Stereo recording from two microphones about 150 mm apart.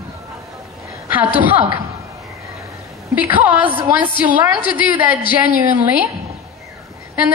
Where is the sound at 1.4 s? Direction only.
10° right (ahead or behind).